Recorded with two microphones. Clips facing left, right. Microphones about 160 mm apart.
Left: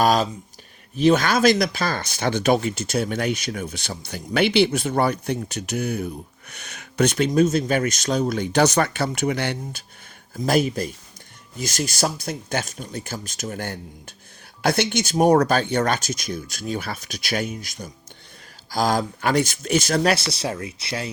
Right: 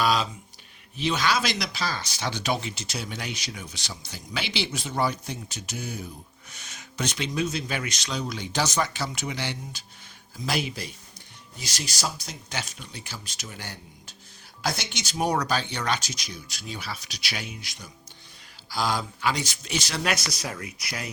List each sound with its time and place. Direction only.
0.0 s speech: 45° left (ahead or behind)
20.1 s speech: 30° left (ahead or behind)